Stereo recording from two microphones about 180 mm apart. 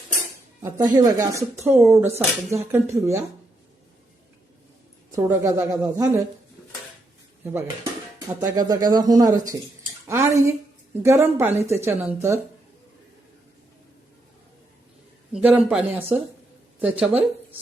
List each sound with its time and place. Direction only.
0.9 s speech: 20° right (ahead or behind)
5.1 s speech: 15° right (ahead or behind)
8.4 s speech: 20° right (ahead or behind)
15.3 s speech: 5° right (ahead or behind)